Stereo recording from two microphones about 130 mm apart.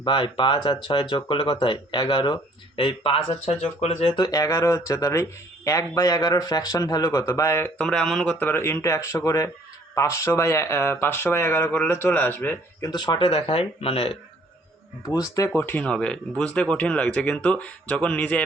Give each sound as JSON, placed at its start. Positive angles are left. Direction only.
{"t": 0.0, "sound": "speech", "side_deg": 40}
{"t": 4.1, "sound": "speech", "side_deg": 30}
{"t": 7.8, "sound": "speech", "side_deg": 5}
{"t": 12.9, "sound": "speech", "side_deg": 35}
{"t": 15.0, "sound": "speech", "side_deg": 25}